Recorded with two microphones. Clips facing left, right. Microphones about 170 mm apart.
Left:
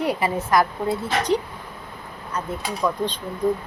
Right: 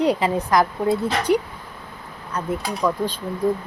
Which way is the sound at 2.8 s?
10° right (ahead or behind).